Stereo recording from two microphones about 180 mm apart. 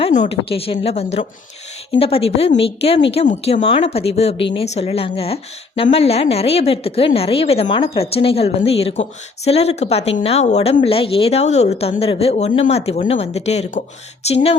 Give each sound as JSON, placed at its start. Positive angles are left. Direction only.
{"t": 0.0, "sound": "a woman's voice", "side_deg": 40}